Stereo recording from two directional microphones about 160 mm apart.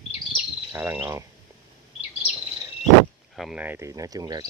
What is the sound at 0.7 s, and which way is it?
Speech, 15° right (ahead or behind).